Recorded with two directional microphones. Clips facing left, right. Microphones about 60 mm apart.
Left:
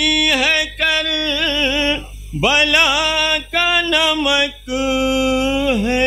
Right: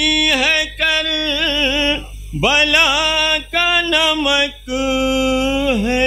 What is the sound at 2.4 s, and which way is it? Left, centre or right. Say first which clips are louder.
Music: even; right.